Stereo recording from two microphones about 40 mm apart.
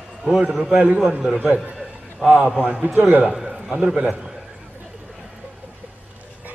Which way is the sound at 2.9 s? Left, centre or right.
Right.